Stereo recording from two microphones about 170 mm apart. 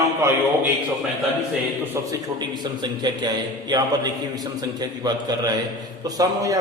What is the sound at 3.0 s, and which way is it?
A man's voice, 25° right (ahead or behind).